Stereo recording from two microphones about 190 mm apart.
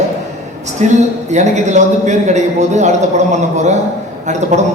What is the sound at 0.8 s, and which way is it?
A man's voice, 40° right (ahead or behind).